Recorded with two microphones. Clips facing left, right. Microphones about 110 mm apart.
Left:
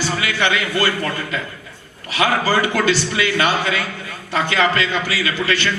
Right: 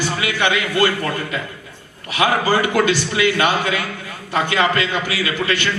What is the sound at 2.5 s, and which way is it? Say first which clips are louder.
A man's voice: right 1 dB; 20° right (ahead or behind).